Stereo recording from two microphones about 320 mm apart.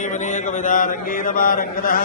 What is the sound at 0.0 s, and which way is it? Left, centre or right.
A man's voice, left.